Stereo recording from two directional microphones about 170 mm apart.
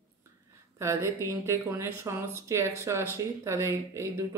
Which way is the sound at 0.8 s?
15° right (ahead or behind).